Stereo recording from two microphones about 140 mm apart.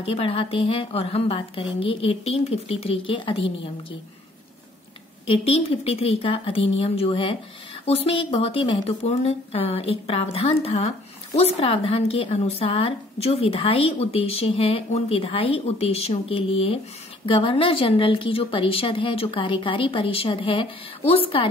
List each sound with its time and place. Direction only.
0.0 s a woman's voice: 40° left (ahead or behind)
5.2 s a woman's voice: 45° left (ahead or behind)